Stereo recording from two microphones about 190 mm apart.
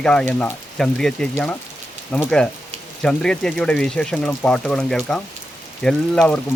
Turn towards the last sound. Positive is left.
turn(degrees=5)  # may be behind; listen again after turning